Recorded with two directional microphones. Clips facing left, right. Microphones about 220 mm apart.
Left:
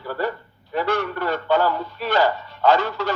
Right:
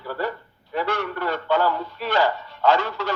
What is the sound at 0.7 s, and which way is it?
Speech, 40° left (ahead or behind).